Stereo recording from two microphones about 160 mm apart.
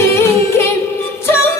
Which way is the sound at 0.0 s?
15° left (ahead or behind).